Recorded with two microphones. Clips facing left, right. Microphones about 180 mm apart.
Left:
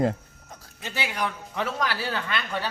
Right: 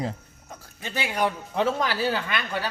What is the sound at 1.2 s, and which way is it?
Speech, 30° right (ahead or behind).